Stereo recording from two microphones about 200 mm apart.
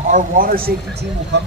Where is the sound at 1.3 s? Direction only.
60° right (ahead or behind).